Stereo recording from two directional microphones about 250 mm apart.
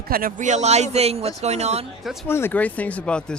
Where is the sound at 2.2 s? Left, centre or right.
Centre.